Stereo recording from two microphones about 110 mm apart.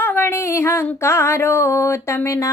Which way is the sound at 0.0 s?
20° left (ahead or behind).